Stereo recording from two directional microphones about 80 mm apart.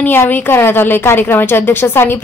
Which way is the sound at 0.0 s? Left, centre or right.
Left.